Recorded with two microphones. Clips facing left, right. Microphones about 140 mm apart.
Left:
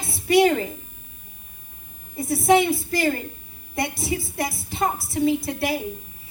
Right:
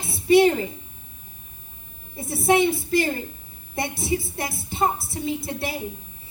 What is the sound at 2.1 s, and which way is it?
Speech, 25° right (ahead or behind).